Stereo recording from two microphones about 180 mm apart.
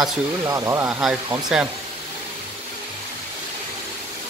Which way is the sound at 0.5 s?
15° right (ahead or behind).